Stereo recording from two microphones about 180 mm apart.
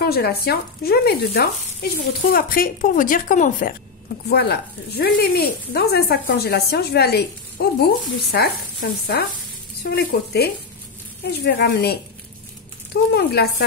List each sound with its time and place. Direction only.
0.0 s speech: 60° left (ahead or behind)
4.3 s speech: 65° left (ahead or behind)
9.8 s speech: 65° left (ahead or behind)